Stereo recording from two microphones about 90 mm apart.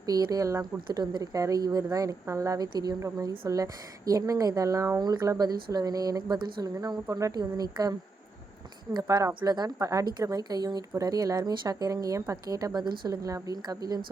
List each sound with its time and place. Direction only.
0.0 s speech: 45° right (ahead or behind)
4.9 s speech: 45° right (ahead or behind)
9.0 s speech: 35° right (ahead or behind)
9.4 s speech: 45° right (ahead or behind)